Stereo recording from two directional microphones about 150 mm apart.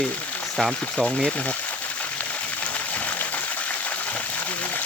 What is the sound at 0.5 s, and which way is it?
Speech, 5° left (ahead or behind).